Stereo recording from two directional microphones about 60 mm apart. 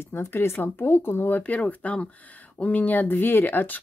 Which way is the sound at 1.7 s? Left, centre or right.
Left.